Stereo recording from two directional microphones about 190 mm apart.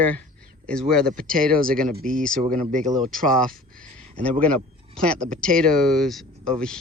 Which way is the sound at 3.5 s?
45° right (ahead or behind).